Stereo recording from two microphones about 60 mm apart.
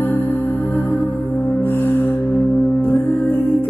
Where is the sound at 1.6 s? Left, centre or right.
Left.